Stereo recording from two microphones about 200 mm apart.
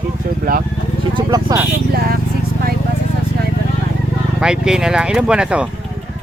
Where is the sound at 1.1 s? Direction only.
20° right (ahead or behind).